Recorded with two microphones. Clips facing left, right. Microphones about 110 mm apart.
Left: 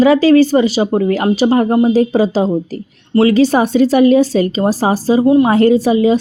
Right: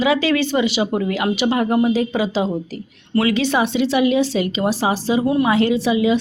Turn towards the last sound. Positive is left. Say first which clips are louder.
# left 6 dB
turn(degrees=40)  # may be behind; listen again after turning